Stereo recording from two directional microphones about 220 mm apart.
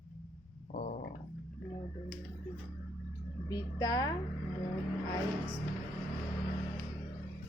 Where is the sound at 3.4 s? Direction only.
15° left (ahead or behind).